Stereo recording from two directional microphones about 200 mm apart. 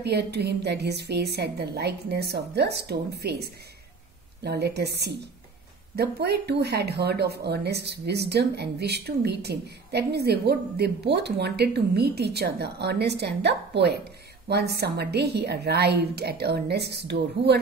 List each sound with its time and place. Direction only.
0.0 s speech: 55° right (ahead or behind)